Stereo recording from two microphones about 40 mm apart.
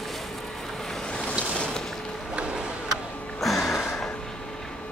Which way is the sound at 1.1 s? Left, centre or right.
Left.